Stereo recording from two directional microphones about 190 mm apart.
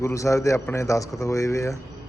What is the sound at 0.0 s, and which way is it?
A man's voice, 15° left (ahead or behind).